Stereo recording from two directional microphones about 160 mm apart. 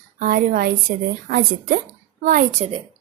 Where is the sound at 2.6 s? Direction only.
45° right (ahead or behind).